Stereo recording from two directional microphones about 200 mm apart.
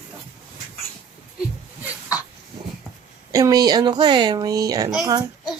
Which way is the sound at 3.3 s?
15° right (ahead or behind).